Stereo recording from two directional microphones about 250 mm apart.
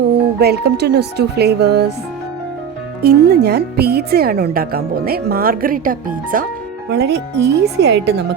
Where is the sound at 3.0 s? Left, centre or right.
Right.